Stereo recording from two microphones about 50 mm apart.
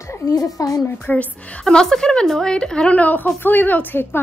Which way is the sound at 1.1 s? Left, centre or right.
Left.